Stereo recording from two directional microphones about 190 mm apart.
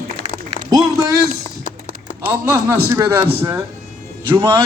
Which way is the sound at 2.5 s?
15° right (ahead or behind).